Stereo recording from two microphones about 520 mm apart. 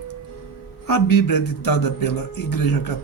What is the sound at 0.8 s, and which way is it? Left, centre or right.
Speech, left.